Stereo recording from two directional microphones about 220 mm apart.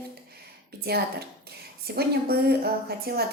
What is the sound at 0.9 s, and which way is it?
A woman's voice, 45° right (ahead or behind).